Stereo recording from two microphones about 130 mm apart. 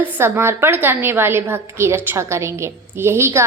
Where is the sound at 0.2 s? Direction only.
20° right (ahead or behind).